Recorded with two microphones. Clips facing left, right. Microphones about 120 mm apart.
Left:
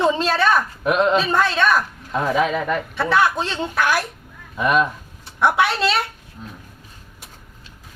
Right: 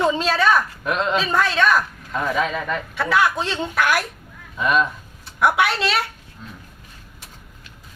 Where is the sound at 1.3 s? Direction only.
Centre (ahead or behind).